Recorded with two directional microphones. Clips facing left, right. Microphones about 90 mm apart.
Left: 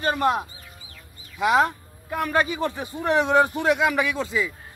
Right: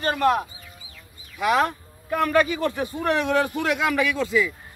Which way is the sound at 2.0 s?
20° left (ahead or behind).